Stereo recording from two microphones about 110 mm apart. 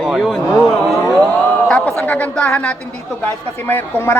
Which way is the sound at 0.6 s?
5° left (ahead or behind).